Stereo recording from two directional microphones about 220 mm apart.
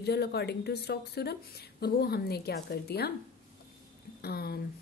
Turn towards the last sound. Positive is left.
turn(degrees=45)  # may be behind; listen again after turning